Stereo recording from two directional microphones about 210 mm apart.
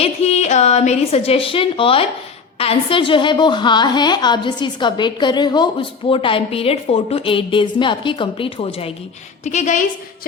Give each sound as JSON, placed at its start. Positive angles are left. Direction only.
{"t": 0.0, "sound": "a woman's voice", "side_deg": 30}